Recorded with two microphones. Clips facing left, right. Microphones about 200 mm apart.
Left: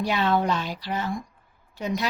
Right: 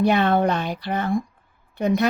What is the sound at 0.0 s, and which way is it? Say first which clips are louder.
Speech: right 5 dB; 55° right (ahead or behind).